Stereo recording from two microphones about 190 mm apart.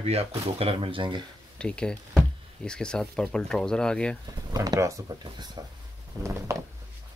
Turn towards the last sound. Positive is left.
turn(degrees=-15)  # may be behind; listen again after turning